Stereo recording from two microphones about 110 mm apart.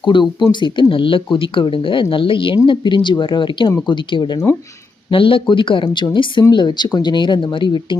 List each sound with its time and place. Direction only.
0.0 s speech: 45° left (ahead or behind)